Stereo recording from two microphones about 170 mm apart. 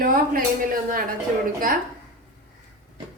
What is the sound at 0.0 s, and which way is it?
Speech, 55° right (ahead or behind).